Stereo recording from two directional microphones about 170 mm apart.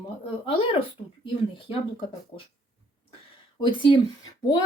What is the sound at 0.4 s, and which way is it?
Speech, 30° left (ahead or behind).